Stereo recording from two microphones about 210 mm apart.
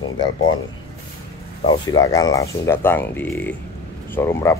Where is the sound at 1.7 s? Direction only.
20° left (ahead or behind).